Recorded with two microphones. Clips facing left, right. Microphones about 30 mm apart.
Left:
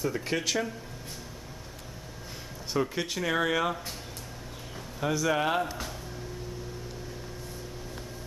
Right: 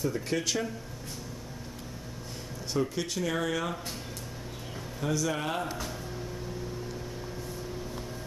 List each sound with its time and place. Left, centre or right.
0.1 s speech: centre
2.7 s speech: centre
5.0 s speech: centre
5.6 s speech: centre